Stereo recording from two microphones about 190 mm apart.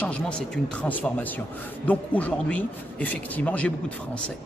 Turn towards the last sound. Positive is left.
turn(degrees=10)  # may be behind; listen again after turning